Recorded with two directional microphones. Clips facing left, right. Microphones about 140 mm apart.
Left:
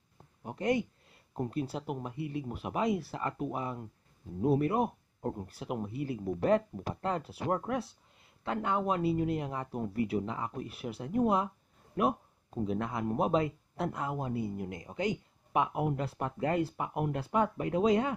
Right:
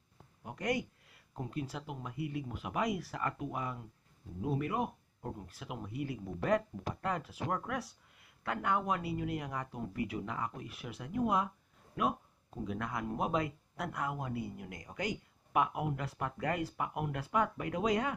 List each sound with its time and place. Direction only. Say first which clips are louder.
0.4 s a sound: left 5 dB; 30° left (ahead or behind)
1.4 s speech: left 6 dB; 35° left (ahead or behind)
9.1 s speech: left 6 dB; 40° left (ahead or behind)
9.4 s speech: left 4 dB; 30° left (ahead or behind)
12.6 s speech: left 5 dB; 30° left (ahead or behind)